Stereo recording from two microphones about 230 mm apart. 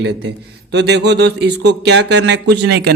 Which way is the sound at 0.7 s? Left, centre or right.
Right.